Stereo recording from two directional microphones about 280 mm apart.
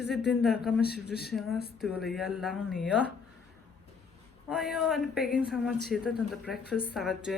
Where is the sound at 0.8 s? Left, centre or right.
Left.